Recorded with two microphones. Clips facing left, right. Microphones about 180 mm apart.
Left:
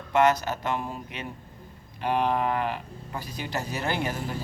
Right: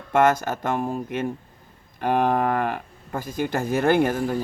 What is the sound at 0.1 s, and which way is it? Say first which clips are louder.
Speech: right 3 dB; 50° right (ahead or behind).